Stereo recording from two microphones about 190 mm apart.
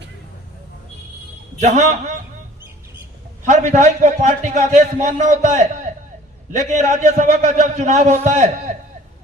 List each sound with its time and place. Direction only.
1.6 s a man's voice: 40° right (ahead or behind)
3.4 s a man's voice: 40° right (ahead or behind)